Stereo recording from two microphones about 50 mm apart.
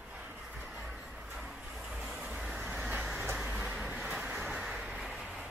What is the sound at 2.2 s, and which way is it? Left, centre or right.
Vehicle, centre.